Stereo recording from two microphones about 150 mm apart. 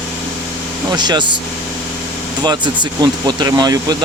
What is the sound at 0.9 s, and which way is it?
Speech, 30° right (ahead or behind).